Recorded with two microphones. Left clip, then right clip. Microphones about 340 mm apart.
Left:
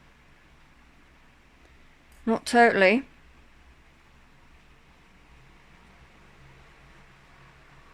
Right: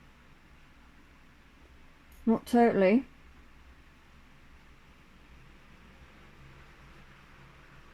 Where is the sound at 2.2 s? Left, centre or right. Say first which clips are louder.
Left 6 dB; left.